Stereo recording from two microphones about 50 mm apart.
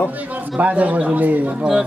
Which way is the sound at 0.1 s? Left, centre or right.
Right.